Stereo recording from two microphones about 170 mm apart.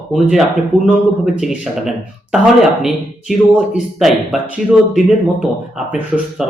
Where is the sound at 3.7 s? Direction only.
5° right (ahead or behind).